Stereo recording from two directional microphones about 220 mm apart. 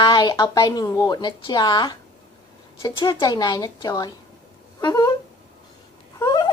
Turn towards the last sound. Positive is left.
turn(degrees=20)  # may be behind; listen again after turning